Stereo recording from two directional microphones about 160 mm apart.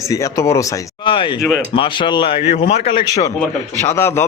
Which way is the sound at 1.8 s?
30° left (ahead or behind).